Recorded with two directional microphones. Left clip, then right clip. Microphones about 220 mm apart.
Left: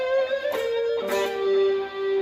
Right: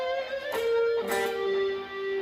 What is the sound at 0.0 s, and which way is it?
Music, 40° left (ahead or behind).